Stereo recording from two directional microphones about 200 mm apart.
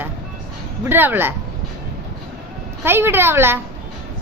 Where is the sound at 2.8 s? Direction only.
10° right (ahead or behind).